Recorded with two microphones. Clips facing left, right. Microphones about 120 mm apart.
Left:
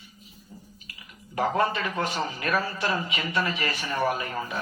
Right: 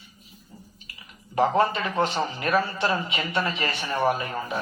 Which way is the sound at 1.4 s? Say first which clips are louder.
Right 3 dB; 25° right (ahead or behind).